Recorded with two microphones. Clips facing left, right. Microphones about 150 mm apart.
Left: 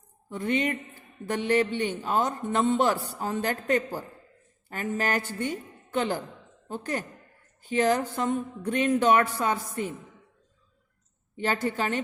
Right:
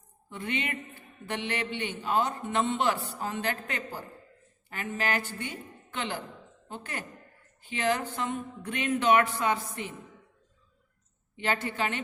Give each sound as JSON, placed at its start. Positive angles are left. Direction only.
{"t": 0.3, "sound": "a man's voice", "side_deg": 40}
{"t": 11.3, "sound": "a man's voice", "side_deg": 40}